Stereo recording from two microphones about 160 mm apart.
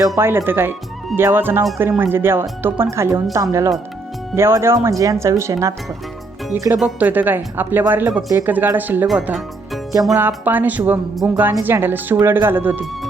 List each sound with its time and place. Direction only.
0.2 s speech: 15° right (ahead or behind)